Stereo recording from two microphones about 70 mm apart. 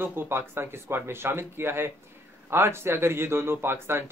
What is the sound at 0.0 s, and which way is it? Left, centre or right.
Speech, right.